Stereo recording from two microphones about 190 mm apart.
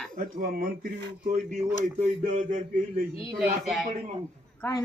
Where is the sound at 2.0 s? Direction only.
40° right (ahead or behind).